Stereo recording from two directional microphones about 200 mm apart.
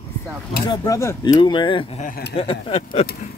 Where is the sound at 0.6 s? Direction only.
15° left (ahead or behind).